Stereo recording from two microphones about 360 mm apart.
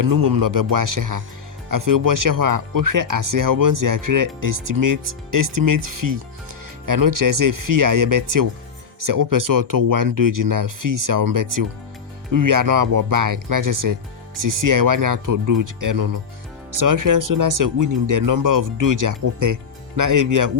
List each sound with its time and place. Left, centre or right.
0.0 s speech: right